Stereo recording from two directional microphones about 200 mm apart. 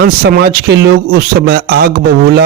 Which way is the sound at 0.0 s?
55° right (ahead or behind).